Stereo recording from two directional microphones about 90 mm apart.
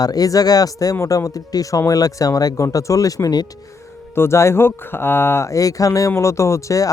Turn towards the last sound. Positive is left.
turn(degrees=35)  # may be behind; listen again after turning